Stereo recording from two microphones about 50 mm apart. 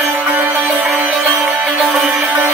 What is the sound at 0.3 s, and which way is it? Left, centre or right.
Music, right.